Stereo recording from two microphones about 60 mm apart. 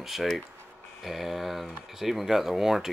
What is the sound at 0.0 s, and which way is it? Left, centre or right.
Speech, centre.